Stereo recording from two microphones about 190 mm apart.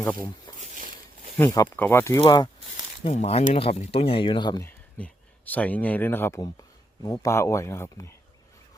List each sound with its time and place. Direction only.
0.6 s a sound: 45° right (ahead or behind)
1.4 s speech: 15° left (ahead or behind)
3.0 s speech: 35° left (ahead or behind)
4.9 s speech: 5° left (ahead or behind)